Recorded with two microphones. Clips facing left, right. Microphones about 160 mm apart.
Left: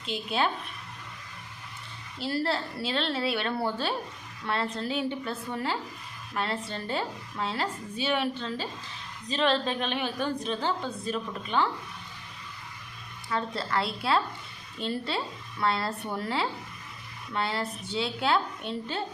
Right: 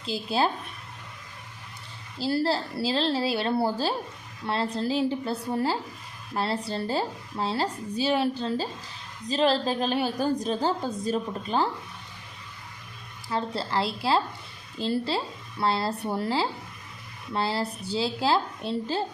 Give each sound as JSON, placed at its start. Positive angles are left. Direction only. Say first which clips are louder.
{"t": 0.0, "sound": "a woman's voice", "louder": "right 3 dB", "side_deg": -35}
{"t": 2.1, "sound": "a woman's voice", "louder": "right 4 dB", "side_deg": -30}
{"t": 13.3, "sound": "a woman's voice", "louder": "right 2 dB", "side_deg": -30}